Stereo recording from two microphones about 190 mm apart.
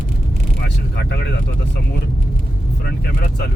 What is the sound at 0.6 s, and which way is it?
Speech, 60° left (ahead or behind).